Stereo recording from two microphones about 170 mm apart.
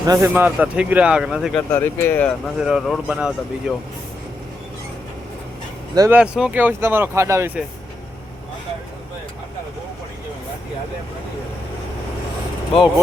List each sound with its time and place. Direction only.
0.0 s a man's voice: 20° right (ahead or behind); by 1.6 s centre (ahead or behind)
1.7 s speech: 15° left (ahead or behind)
2.6 s speech: centre (ahead or behind)
5.9 s speech: 20° right (ahead or behind)
6.1 s a man's voice: 5° right (ahead or behind)